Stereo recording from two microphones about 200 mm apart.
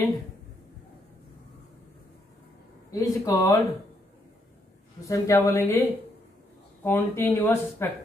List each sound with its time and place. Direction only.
2.9 s speech: 15° left (ahead or behind)
5.0 s speech: 15° left (ahead or behind)
6.8 s speech: 10° left (ahead or behind)